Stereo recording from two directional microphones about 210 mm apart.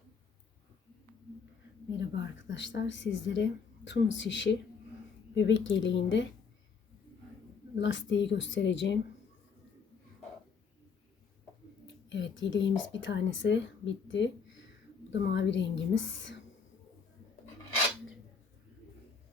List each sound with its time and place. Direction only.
2.0 s speech: 60° left (ahead or behind)
7.8 s speech: 60° left (ahead or behind)
12.0 s speech: 60° left (ahead or behind)